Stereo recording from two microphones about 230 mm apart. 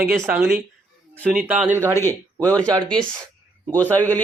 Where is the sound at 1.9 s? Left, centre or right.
Centre.